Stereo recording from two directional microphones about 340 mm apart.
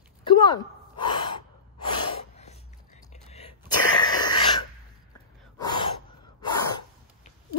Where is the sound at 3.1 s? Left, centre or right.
Centre.